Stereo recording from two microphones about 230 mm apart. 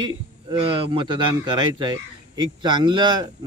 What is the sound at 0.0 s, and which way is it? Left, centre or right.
Speech, centre.